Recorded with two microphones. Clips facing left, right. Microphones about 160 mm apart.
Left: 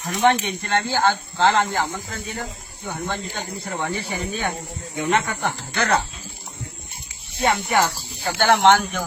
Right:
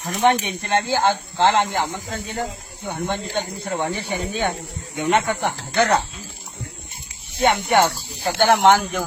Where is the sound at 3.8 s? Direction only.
20° right (ahead or behind).